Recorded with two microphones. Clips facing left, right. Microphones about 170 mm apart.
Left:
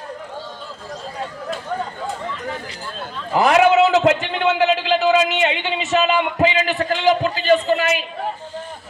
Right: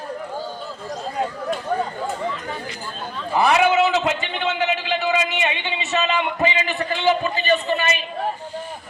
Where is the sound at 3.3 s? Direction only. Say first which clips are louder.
Left 3 dB; 90° left.